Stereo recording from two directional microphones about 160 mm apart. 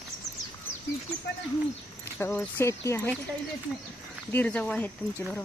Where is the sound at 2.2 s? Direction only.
10° left (ahead or behind).